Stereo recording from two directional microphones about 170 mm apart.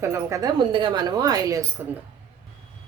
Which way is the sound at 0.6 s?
30° right (ahead or behind).